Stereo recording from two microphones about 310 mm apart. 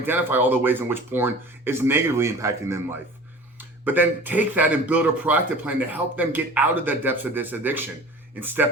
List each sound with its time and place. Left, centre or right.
0.0 s speech: centre